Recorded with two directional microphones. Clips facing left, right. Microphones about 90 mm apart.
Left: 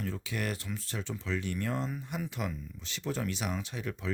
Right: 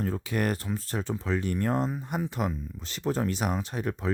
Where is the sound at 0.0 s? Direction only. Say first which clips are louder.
Right 7 dB; 45° right (ahead or behind).